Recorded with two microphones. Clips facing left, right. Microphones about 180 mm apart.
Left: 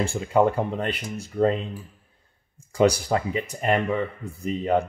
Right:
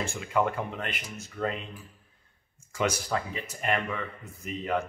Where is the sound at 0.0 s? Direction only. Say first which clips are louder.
Left 7 dB; 35° left (ahead or behind).